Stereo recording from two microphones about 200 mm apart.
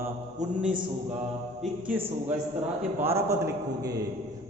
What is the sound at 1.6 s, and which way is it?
A man's voice, 10° right (ahead or behind).